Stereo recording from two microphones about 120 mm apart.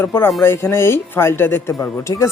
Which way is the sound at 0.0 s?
20° left (ahead or behind).